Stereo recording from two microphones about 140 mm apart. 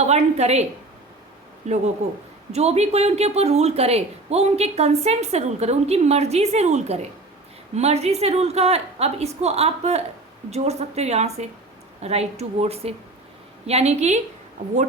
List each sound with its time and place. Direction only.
0.0 s speech: 50° right (ahead or behind)